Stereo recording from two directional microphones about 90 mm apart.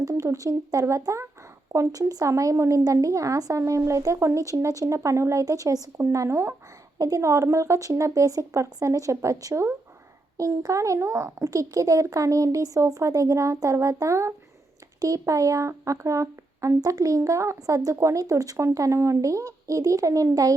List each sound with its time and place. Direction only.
0.0 s speech: 40° right (ahead or behind)